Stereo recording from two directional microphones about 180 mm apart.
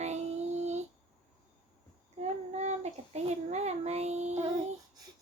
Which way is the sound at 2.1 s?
40° right (ahead or behind).